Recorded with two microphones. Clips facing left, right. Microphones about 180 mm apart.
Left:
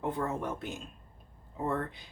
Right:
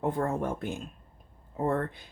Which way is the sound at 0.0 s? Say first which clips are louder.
Right 4 dB; 45° right (ahead or behind).